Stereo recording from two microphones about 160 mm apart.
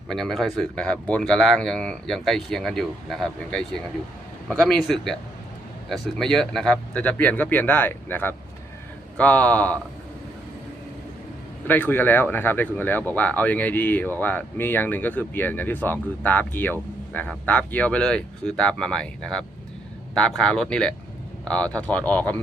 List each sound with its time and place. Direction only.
0.1 s speech: centre (ahead or behind)
11.7 s speech: 10° left (ahead or behind)